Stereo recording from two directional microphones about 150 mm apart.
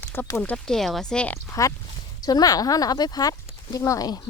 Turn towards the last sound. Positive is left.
turn(degrees=25)  # may be behind; listen again after turning